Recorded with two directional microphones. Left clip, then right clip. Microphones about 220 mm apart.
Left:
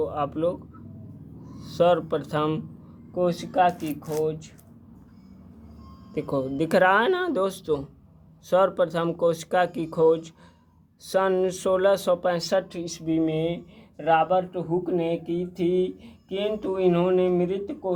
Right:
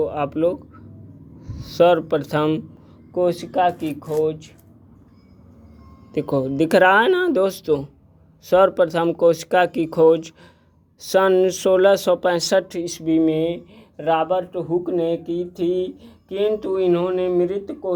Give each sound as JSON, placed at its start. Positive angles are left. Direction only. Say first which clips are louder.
{"t": 0.0, "sound": "speech", "louder": "right 5 dB", "side_deg": -25}
{"t": 3.2, "sound": "speech", "louder": "right 3 dB", "side_deg": -35}
{"t": 6.1, "sound": "speech", "louder": "right 6 dB", "side_deg": -25}